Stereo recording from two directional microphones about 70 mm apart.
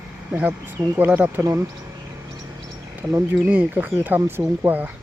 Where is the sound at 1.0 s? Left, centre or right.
Right.